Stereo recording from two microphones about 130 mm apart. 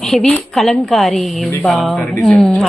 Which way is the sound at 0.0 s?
5° left (ahead or behind).